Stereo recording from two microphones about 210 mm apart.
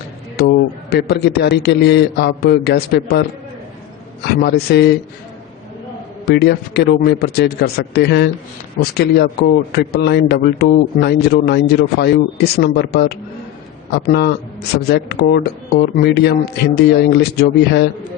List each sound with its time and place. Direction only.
0.3 s a man's voice: 50° left (ahead or behind)
4.4 s a man's voice: 50° left (ahead or behind)
6.2 s a man's voice: 50° left (ahead or behind)
14.8 s a man's voice: 50° left (ahead or behind)